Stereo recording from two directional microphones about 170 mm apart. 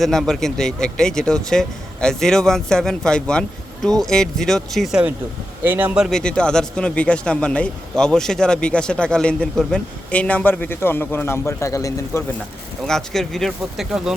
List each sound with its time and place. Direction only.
0.0 s speech: centre (ahead or behind); by 12.2 s 20° left (ahead or behind)
12.8 s speech: centre (ahead or behind)